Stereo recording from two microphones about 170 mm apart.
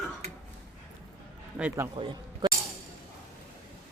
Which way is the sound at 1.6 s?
10° right (ahead or behind).